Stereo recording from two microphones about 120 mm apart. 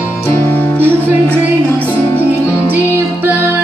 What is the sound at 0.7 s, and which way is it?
Music, 15° right (ahead or behind).